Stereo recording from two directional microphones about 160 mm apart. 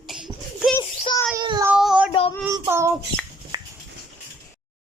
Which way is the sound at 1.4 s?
25° right (ahead or behind).